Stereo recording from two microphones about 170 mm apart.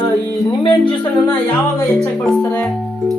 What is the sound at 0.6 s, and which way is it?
Music, 25° left (ahead or behind).